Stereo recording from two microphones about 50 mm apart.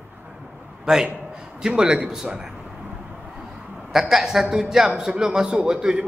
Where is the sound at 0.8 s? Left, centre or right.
Centre.